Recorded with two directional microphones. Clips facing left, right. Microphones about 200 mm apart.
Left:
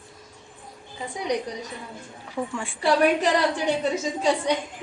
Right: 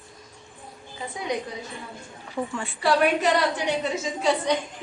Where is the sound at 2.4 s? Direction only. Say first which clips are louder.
Even; centre (ahead or behind).